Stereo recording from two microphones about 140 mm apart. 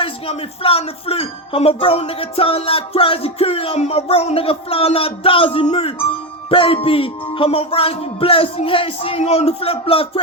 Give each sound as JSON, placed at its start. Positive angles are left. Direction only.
{"t": 0.0, "sound": "speech", "side_deg": 40}